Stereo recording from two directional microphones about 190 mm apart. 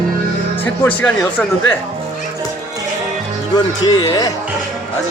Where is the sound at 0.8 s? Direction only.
10° left (ahead or behind).